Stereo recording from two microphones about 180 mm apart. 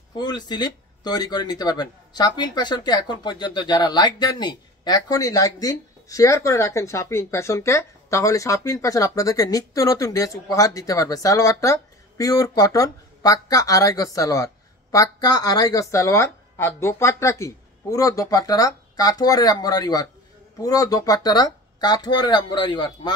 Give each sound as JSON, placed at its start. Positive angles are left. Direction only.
{"t": 0.1, "sound": "speech", "side_deg": 25}